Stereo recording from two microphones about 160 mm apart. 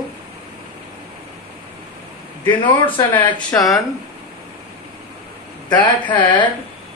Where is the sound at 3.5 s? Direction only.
20° left (ahead or behind).